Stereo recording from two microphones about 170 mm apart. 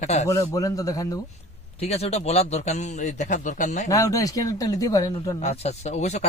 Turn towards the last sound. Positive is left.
turn(degrees=40)  # may be behind; listen again after turning